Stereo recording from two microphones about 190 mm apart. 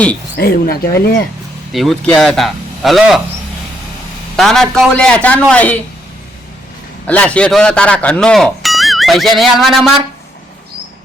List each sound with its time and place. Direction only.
0.3 s speech: 55° left (ahead or behind)
1.7 s speech: centre (ahead or behind)
4.4 s speech: centre (ahead or behind)
7.1 s speech: 5° left (ahead or behind)